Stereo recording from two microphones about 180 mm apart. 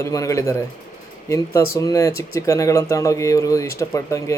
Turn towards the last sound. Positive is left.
turn(degrees=15)  # may be behind; listen again after turning